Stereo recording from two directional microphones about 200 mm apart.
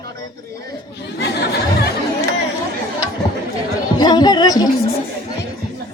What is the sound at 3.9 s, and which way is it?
Music, 20° left (ahead or behind).